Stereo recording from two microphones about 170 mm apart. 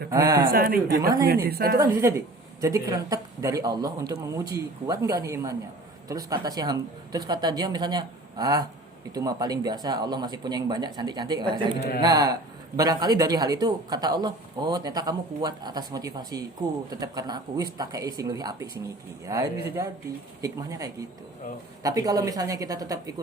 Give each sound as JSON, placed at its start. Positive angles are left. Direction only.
{"t": 0.1, "sound": "speech", "side_deg": -20}
{"t": 0.5, "sound": "a woman's voice", "side_deg": -65}
{"t": 1.8, "sound": "speech", "side_deg": -15}